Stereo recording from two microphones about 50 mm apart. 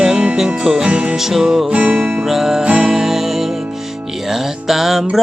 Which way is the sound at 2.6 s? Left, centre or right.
Right.